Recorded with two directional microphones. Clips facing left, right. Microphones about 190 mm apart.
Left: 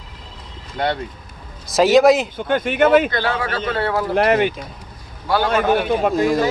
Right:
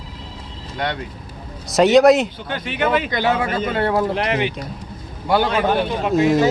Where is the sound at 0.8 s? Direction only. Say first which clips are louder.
Left 3 dB; 30° left (ahead or behind).